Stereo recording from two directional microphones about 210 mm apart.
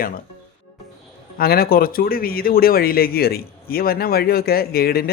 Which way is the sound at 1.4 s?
45° left (ahead or behind).